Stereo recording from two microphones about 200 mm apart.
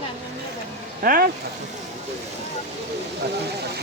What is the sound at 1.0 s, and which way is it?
Speech, 45° right (ahead or behind).